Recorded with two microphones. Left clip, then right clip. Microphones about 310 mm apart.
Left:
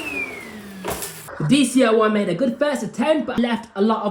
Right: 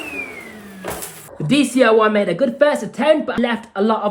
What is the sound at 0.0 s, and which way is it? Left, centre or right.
Vehicle, centre.